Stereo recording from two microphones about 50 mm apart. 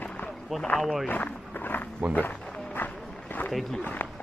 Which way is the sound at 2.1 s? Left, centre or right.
Left.